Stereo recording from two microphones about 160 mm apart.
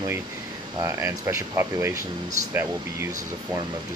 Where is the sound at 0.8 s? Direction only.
15° right (ahead or behind).